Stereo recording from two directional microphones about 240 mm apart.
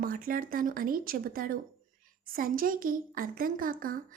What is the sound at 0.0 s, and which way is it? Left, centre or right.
Speech, right.